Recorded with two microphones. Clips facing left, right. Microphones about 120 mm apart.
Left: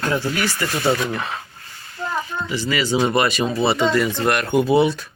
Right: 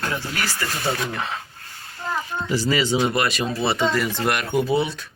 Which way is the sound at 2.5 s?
40° right (ahead or behind).